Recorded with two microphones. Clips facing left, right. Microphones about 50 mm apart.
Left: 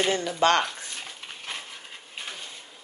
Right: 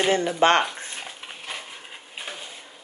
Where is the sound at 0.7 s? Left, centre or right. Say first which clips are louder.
Right 3 dB; right.